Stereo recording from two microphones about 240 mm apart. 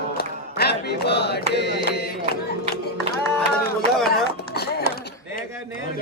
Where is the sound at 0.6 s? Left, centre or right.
Left.